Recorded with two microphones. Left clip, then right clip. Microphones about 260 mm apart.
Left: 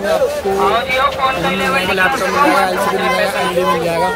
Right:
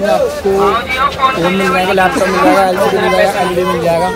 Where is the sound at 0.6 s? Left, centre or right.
Left.